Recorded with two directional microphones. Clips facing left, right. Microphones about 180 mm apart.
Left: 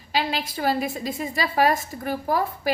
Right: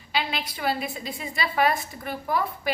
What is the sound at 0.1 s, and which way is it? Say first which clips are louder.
A woman's voice: left 3 dB; 40° left (ahead or behind).